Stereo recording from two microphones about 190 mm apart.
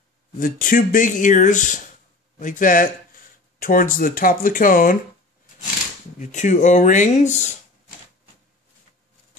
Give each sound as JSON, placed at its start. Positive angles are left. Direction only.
{"t": 0.4, "sound": "speech", "side_deg": 45}
{"t": 6.1, "sound": "speech", "side_deg": 40}